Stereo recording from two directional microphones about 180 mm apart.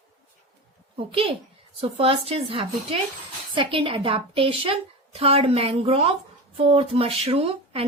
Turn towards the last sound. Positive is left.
turn(degrees=-30)  # may be behind; listen again after turning